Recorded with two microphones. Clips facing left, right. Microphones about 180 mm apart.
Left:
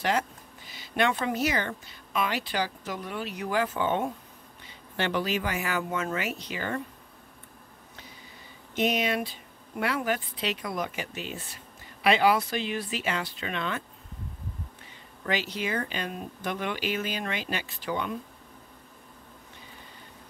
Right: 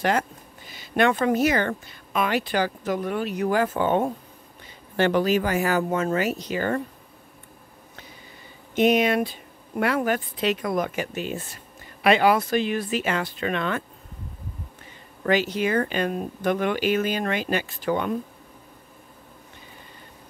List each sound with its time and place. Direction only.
0.7 s speech: 50° right (ahead or behind)
8.7 s speech: 55° right (ahead or behind)
15.2 s speech: 50° right (ahead or behind)